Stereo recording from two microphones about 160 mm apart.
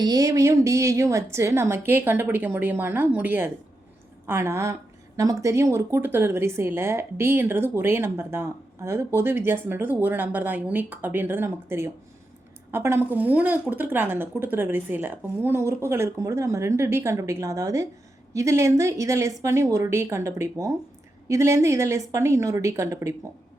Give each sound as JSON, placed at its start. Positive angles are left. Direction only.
{"t": 0.0, "sound": "a woman's voice", "side_deg": -25}